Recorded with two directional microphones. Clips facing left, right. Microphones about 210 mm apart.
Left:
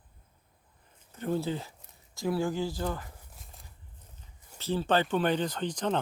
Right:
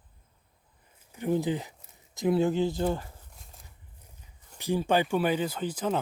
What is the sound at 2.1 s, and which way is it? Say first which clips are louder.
Speech: right 5 dB; 20° right (ahead or behind).